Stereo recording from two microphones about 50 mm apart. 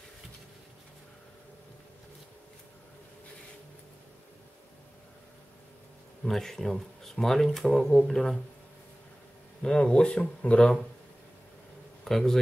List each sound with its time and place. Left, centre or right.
6.2 s speech: centre
9.6 s speech: centre
12.0 s speech: centre